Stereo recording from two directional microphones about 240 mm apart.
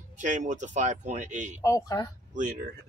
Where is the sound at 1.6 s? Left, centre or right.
Centre.